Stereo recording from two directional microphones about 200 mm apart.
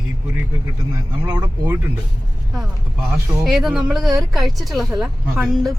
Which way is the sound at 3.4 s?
Centre (ahead or behind).